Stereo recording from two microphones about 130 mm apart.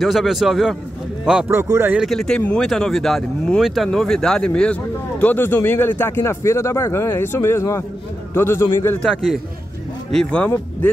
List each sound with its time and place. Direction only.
0.0 s speech: centre (ahead or behind)
1.5 s a man's voice: 20° right (ahead or behind)
2.0 s speech: centre (ahead or behind); by 8.6 s 20° left (ahead or behind)
9.0 s speech: 5° left (ahead or behind)